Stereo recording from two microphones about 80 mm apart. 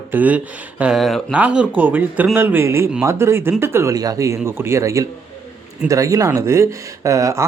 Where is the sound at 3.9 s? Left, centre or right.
Right.